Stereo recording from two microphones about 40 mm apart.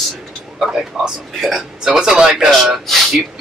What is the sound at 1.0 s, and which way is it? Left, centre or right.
Speech, centre.